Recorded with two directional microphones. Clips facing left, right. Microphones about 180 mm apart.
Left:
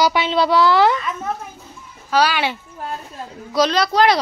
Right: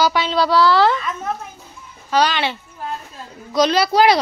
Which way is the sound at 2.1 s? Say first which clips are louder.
Even; 5° left (ahead or behind).